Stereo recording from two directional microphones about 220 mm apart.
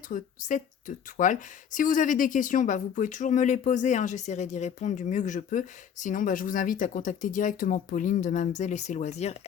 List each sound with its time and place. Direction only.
0.1 s speech: 35° left (ahead or behind)